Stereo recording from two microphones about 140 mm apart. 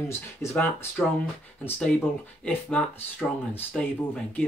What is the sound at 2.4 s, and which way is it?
Speech, 10° left (ahead or behind).